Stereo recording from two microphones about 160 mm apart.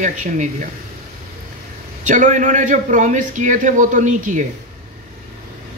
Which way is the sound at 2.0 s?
50° right (ahead or behind).